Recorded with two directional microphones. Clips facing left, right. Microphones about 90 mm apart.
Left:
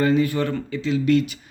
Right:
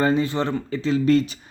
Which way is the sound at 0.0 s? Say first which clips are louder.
Left 1 dB; 30° right (ahead or behind).